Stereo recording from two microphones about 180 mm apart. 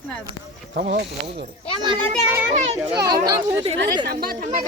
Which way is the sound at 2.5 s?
35° right (ahead or behind).